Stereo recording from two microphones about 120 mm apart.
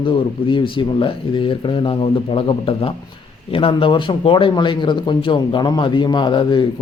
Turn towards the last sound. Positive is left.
turn(degrees=40)  # may be behind; listen again after turning